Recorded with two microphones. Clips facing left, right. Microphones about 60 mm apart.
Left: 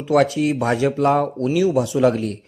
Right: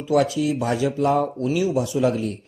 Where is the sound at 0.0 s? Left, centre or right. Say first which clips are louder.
Left 3 dB; left.